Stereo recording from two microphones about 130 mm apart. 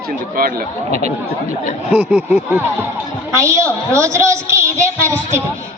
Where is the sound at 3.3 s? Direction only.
25° right (ahead or behind).